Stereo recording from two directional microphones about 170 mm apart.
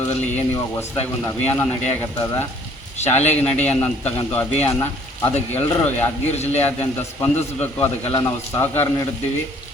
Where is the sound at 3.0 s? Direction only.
40° left (ahead or behind).